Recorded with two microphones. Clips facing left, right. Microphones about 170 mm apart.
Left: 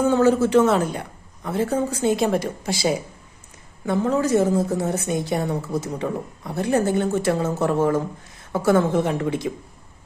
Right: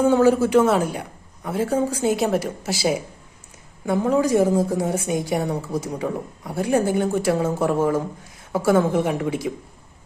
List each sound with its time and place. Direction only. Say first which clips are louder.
0.0 s a woman's voice: right 1 dB; 10° right (ahead or behind)